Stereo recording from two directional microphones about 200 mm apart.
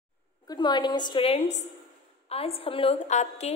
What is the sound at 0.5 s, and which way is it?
A woman's voice, 20° left (ahead or behind).